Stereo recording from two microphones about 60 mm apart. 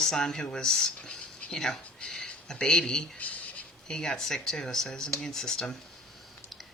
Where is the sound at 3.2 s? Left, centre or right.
Left.